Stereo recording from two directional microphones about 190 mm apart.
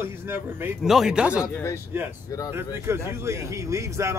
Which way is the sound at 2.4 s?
15° right (ahead or behind).